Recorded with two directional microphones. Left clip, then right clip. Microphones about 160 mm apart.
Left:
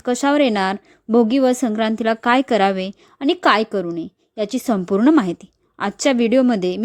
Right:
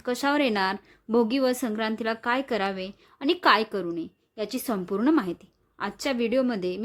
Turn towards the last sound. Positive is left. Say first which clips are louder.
# left 9 dB
turn(degrees=50)  # may be behind; listen again after turning